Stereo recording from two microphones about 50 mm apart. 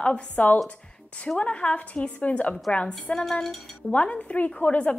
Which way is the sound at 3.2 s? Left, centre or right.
Centre.